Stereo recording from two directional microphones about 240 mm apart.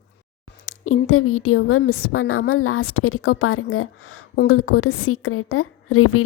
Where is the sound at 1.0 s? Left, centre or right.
Left.